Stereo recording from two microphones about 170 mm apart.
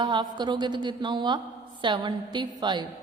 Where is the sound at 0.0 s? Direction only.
25° right (ahead or behind).